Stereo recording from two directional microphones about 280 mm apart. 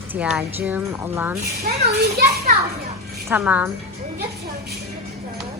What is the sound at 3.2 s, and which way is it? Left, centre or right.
Speech, centre.